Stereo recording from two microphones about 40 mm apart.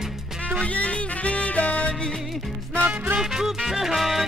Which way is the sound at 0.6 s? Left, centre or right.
Left.